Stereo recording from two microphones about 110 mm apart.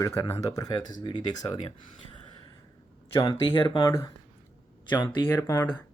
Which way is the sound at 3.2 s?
45° left (ahead or behind).